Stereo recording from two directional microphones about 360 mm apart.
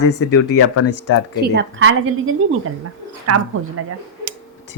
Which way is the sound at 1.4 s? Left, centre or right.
Right.